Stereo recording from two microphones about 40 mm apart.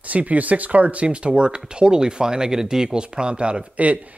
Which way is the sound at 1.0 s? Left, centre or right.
Right.